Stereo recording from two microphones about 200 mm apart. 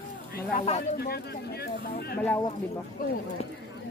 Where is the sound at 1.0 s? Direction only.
50° left (ahead or behind).